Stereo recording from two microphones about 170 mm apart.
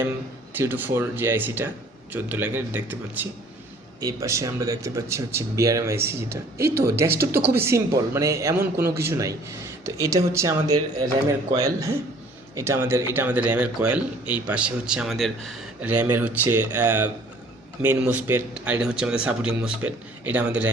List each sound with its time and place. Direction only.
0.5 s a man's voice: 10° right (ahead or behind)
15.8 s a man's voice: 10° right (ahead or behind)